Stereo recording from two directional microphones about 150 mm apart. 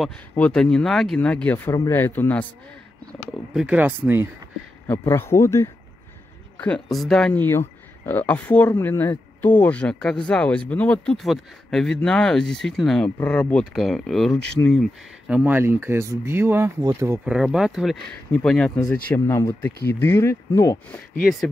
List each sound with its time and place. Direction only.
0.4 s speech: 5° left (ahead or behind)
3.1 s speech: 5° right (ahead or behind)
4.8 s speech: 15° left (ahead or behind)
6.6 s speech: 5° left (ahead or behind)
7.4 s speech: 15° left (ahead or behind)
15.3 s speech: 15° right (ahead or behind)
17.2 s speech: 5° right (ahead or behind); by 20.8 s 20° left (ahead or behind)